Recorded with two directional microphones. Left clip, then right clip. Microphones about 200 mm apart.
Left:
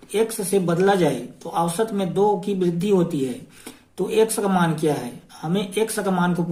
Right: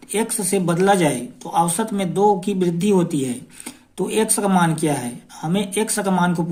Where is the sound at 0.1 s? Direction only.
35° right (ahead or behind).